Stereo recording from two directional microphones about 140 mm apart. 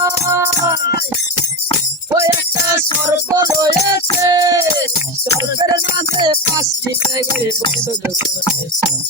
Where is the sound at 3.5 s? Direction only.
25° right (ahead or behind).